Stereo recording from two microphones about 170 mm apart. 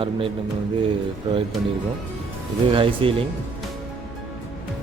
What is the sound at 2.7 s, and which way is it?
Speech, 30° right (ahead or behind).